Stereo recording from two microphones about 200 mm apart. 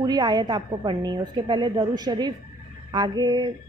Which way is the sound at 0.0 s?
20° right (ahead or behind).